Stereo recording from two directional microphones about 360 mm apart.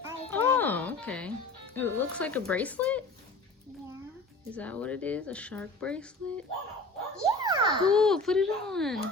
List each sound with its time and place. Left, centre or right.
0.3 s music: centre
1.7 s speech: centre
4.5 s speech: centre
7.3 s children playing: centre
7.9 s speech: centre